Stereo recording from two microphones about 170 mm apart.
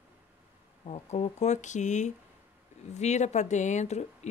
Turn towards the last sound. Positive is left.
turn(degrees=40)  # may be behind; listen again after turning